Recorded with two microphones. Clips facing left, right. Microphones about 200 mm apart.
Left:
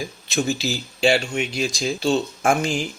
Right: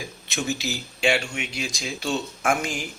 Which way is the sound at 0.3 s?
30° left (ahead or behind).